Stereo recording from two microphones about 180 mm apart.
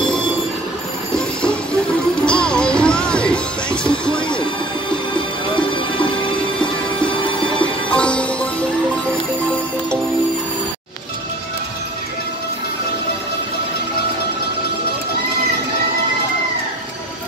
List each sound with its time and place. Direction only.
0.0 s music: 5° left (ahead or behind)
5.6 s music: 25° left (ahead or behind)
7.9 s music: 5° left (ahead or behind)